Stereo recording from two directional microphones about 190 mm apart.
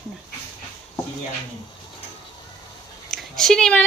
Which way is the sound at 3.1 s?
Centre (ahead or behind).